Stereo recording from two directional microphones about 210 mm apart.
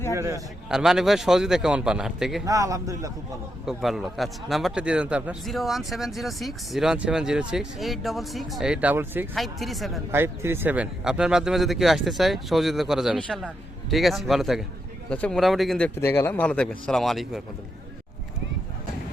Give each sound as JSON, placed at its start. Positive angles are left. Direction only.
{"t": 0.1, "sound": "a man's voice", "side_deg": -15}
{"t": 0.7, "sound": "a man's voice", "side_deg": 0}
{"t": 2.5, "sound": "a man's voice", "side_deg": -15}
{"t": 3.7, "sound": "a man's voice", "side_deg": 0}
{"t": 10.1, "sound": "a man's voice", "side_deg": -10}
{"t": 16.0, "sound": "a man's voice", "side_deg": 10}